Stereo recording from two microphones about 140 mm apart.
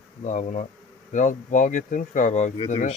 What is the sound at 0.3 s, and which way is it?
Speech, 60° left (ahead or behind).